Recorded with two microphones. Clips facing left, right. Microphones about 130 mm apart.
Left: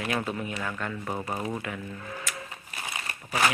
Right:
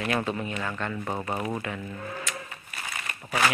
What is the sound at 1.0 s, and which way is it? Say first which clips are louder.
Speech: right 1 dB; 15° right (ahead or behind).